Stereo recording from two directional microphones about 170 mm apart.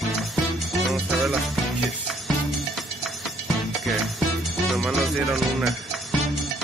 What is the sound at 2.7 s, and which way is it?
Music, centre (ahead or behind).